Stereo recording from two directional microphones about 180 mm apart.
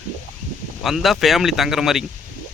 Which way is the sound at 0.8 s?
Centre (ahead or behind).